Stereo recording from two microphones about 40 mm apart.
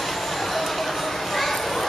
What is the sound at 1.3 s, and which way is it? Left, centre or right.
Children playing, centre.